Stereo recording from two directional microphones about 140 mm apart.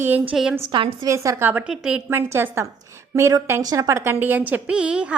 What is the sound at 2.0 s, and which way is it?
A woman's voice, 15° right (ahead or behind).